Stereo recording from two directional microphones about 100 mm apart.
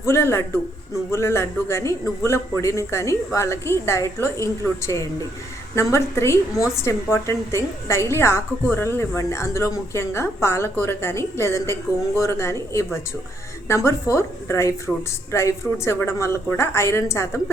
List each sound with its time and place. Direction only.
0.0 s a woman's voice: 25° left (ahead or behind)
14.9 s speech: 5° left (ahead or behind)
15.3 s a woman's voice: 30° left (ahead or behind)